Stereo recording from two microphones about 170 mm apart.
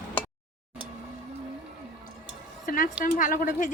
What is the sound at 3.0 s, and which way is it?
Speech, 50° left (ahead or behind).